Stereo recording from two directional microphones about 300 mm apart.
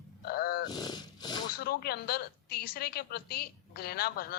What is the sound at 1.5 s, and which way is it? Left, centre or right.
A woman's voice, left.